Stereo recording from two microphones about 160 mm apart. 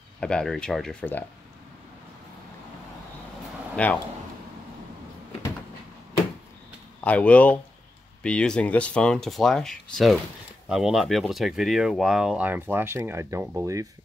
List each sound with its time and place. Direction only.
0.2 s speech: 5° left (ahead or behind)
3.7 s speech: 10° left (ahead or behind)
7.0 s speech: 10° left (ahead or behind); by 13.8 s 20° right (ahead or behind)